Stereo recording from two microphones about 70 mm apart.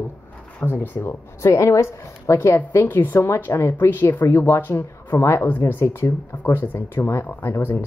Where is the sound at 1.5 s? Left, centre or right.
Left.